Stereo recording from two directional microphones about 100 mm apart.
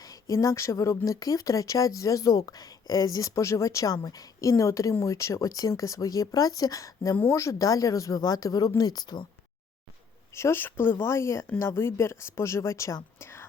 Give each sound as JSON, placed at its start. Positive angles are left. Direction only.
{"t": 0.0, "sound": "a sound", "side_deg": 40}
{"t": 0.3, "sound": "speech", "side_deg": 30}
{"t": 10.3, "sound": "speech", "side_deg": 25}